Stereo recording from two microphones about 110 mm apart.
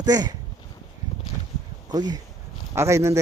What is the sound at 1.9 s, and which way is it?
Speech, 35° right (ahead or behind).